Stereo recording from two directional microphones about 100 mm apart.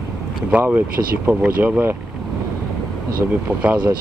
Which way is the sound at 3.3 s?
15° right (ahead or behind).